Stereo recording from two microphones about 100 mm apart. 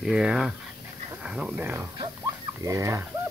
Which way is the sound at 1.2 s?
10° right (ahead or behind).